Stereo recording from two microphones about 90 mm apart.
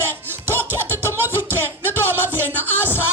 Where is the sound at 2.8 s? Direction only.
25° left (ahead or behind).